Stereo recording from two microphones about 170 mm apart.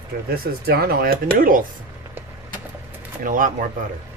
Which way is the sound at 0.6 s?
65° right (ahead or behind).